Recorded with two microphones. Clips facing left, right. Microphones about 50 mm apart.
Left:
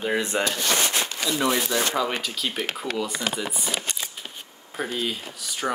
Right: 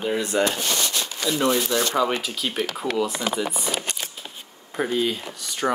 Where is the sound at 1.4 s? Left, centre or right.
Centre.